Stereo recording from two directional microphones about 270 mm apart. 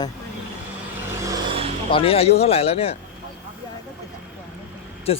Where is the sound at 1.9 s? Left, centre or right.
Left.